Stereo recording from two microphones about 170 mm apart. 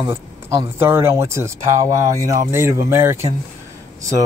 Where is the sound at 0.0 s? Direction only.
15° right (ahead or behind).